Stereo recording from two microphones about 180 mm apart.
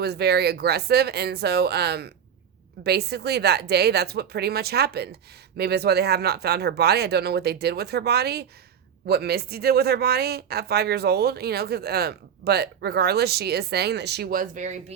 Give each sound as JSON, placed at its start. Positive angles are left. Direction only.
{"t": 0.0, "sound": "speech", "side_deg": -65}